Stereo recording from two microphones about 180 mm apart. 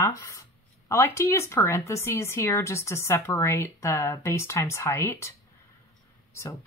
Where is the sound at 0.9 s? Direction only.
15° left (ahead or behind).